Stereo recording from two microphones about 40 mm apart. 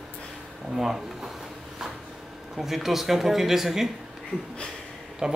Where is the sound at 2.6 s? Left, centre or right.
Centre.